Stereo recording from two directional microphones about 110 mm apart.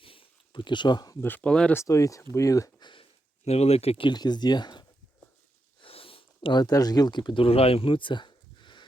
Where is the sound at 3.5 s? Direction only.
75° left (ahead or behind).